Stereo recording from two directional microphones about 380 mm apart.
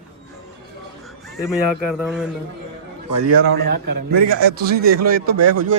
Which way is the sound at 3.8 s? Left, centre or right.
Right.